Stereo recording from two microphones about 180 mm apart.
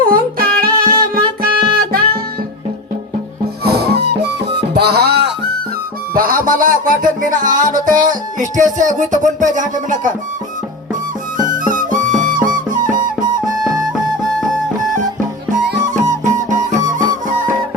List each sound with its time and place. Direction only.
0.1 s music: 55° right (ahead or behind)
3.6 s music: 60° right (ahead or behind)
6.1 s music: 50° right (ahead or behind)
11.3 s music: 50° right (ahead or behind)
13.0 s music: 20° right (ahead or behind)
16.0 s music: 45° right (ahead or behind)